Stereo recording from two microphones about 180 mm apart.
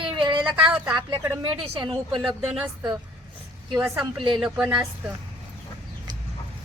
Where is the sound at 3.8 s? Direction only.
5° right (ahead or behind).